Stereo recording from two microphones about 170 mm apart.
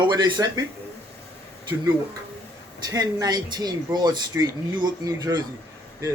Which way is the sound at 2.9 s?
20° right (ahead or behind).